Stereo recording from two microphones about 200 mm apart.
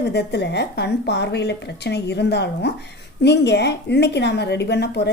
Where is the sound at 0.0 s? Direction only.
55° left (ahead or behind).